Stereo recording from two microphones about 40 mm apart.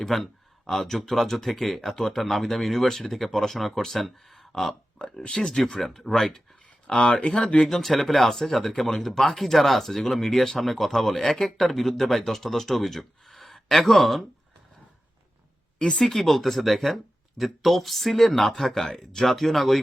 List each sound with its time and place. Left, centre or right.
0.1 s speech: centre
4.9 s speech: left
5.7 s speech: centre
6.8 s speech: left
7.7 s speech: centre
15.8 s speech: left
16.0 s speech: centre